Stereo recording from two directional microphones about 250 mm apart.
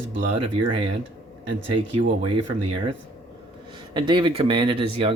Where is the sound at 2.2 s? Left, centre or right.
Right.